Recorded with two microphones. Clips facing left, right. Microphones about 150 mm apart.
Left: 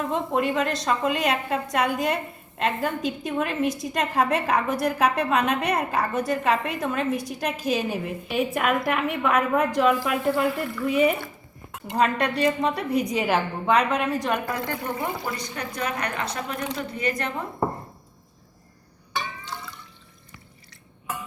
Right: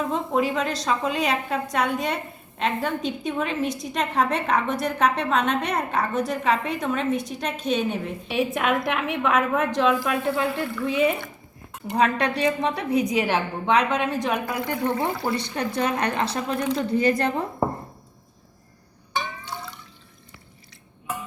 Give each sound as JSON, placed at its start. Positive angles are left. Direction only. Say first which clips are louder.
{"t": 0.0, "sound": "a woman's voice", "louder": "right 1 dB", "side_deg": 0}
{"t": 15.4, "sound": "a woman's voice", "louder": "right 5 dB", "side_deg": -30}